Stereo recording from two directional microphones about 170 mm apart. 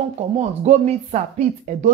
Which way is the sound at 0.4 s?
40° right (ahead or behind).